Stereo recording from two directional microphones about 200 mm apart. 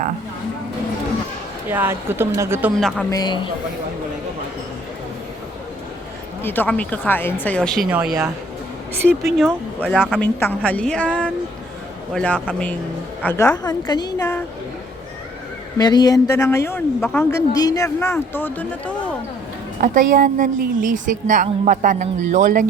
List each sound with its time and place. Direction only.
1.6 s a woman's voice: 10° right (ahead or behind)
3.1 s a woman's voice: 20° left (ahead or behind)
6.4 s speech: 10° left (ahead or behind)
10.2 s speech: 10° left (ahead or behind)
15.8 s speech: 20° left (ahead or behind)
19.8 s a woman's voice: 45° right (ahead or behind)